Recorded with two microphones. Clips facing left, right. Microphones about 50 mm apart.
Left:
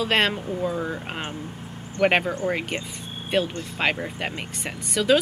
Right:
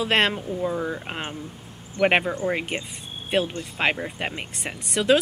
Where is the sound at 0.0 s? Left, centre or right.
Right.